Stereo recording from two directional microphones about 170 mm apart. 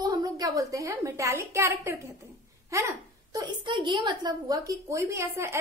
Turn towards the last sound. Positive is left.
turn(degrees=-15)  # may be behind; listen again after turning